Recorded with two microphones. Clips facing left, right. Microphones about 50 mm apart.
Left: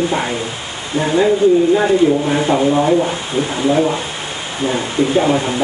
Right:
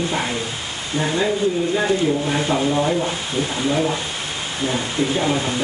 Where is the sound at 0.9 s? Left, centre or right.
Centre.